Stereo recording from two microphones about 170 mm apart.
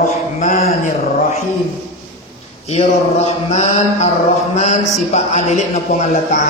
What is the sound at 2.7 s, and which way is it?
A man's voice, 40° left (ahead or behind).